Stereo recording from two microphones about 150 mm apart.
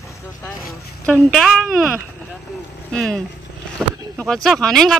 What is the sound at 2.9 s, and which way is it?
Speech, 5° left (ahead or behind).